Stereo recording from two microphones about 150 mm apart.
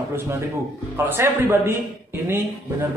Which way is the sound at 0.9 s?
15° right (ahead or behind).